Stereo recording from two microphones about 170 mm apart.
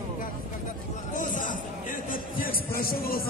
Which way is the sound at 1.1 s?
50° left (ahead or behind).